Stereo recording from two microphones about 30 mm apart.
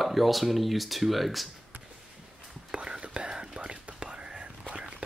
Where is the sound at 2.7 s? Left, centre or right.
Right.